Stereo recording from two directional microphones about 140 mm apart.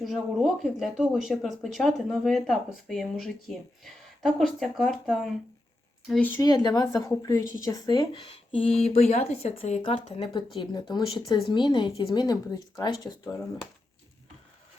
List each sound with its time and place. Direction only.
0.0 s speech: centre (ahead or behind)
6.4 s a woman's voice: 30° left (ahead or behind); by 9.8 s 50° left (ahead or behind)
9.8 s a woman's voice: 35° left (ahead or behind)